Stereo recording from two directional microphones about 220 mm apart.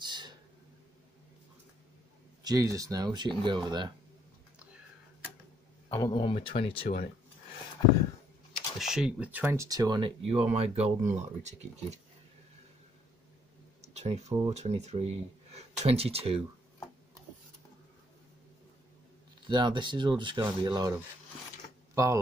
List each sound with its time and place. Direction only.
0.0 s a sound: 20° right (ahead or behind)
2.4 s speech: 15° right (ahead or behind)
5.9 s speech: 15° left (ahead or behind)
8.7 s speech: centre (ahead or behind); by 12.0 s 30° right (ahead or behind)
13.7 s speech: 30° right (ahead or behind)
19.4 s speech: 20° right (ahead or behind)
21.9 s speech: 15° right (ahead or behind)